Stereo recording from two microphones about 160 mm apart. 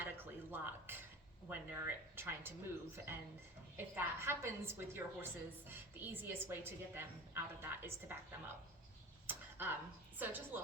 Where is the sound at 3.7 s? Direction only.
15° right (ahead or behind).